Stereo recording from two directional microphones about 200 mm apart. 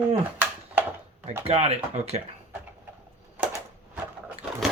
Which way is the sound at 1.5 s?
30° right (ahead or behind).